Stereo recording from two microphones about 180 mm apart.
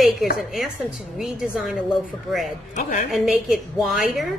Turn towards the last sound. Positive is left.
turn(degrees=0)  # may be behind; listen again after turning